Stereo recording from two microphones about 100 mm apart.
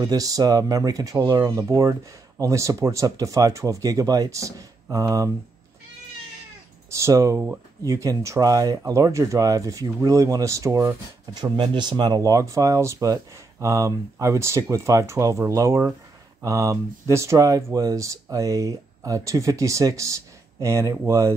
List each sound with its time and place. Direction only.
0.0 s speech: 40° right (ahead or behind)
6.9 s speech: 30° right (ahead or behind)
11.3 s speech: 50° right (ahead or behind); by 21.4 s 25° right (ahead or behind)